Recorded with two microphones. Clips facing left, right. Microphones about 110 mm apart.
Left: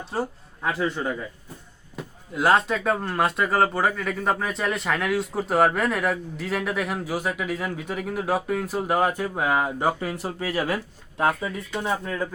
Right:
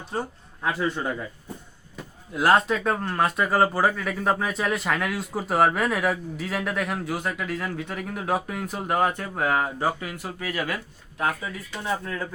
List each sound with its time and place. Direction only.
0.1 s speech: centre (ahead or behind)
2.3 s speech: centre (ahead or behind)
9.8 s speech: 30° left (ahead or behind)